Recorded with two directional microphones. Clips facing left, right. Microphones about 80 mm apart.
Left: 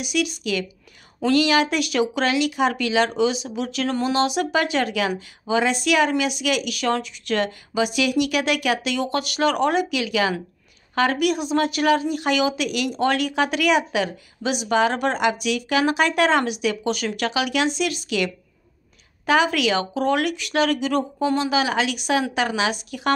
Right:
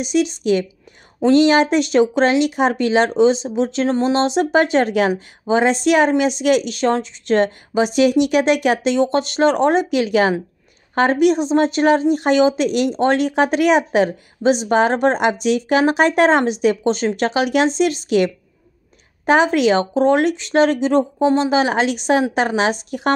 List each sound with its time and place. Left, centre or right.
0.0 s speech: right